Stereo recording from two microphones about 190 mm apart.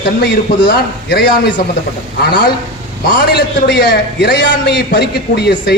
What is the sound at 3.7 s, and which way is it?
A man's voice, 60° left (ahead or behind).